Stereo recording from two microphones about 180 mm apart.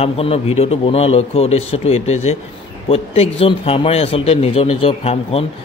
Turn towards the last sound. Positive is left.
turn(degrees=35)  # may be behind; listen again after turning